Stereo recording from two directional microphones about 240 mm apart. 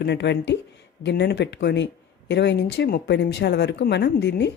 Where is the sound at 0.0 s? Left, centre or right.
Left.